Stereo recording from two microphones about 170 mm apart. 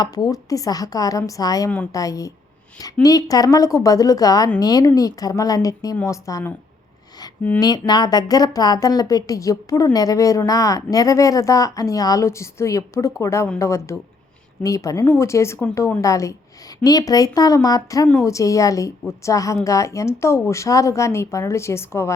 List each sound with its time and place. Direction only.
0.0 s a woman's voice: 20° left (ahead or behind)
7.6 s a woman's voice: 25° left (ahead or behind)